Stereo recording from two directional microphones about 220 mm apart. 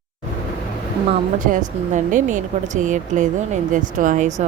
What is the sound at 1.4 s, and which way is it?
Speech, 35° right (ahead or behind).